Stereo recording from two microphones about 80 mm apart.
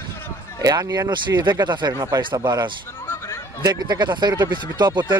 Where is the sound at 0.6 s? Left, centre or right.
Right.